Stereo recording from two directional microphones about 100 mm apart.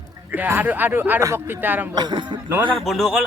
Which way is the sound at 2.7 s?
Centre (ahead or behind).